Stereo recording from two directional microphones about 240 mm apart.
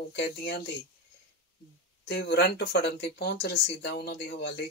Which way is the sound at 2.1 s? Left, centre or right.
Left.